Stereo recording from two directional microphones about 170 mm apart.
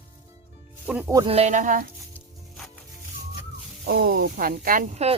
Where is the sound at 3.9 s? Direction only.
65° right (ahead or behind); by 5.1 s 40° right (ahead or behind).